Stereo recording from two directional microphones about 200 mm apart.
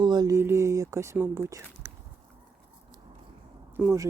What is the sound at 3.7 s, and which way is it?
Speech, 15° right (ahead or behind).